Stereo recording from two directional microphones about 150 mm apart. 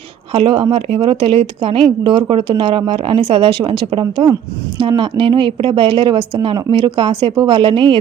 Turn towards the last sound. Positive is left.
turn(degrees=-35)  # may be behind; listen again after turning